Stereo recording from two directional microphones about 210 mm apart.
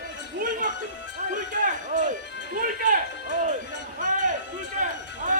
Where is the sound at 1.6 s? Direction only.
35° right (ahead or behind).